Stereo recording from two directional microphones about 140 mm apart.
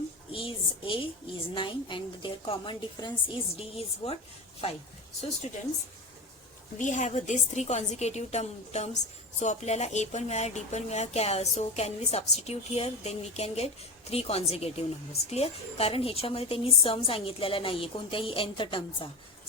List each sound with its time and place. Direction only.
0.3 s a sound: 40° left (ahead or behind)
1.5 s a woman's voice: 35° left (ahead or behind)
6.7 s a woman's voice: 60° left (ahead or behind); by 19.0 s 35° left (ahead or behind)